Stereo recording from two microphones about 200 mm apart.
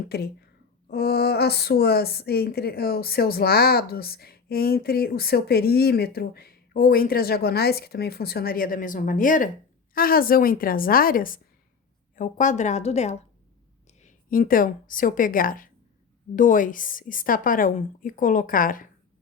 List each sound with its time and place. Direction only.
0.1 s a woman's voice: 55° left (ahead or behind)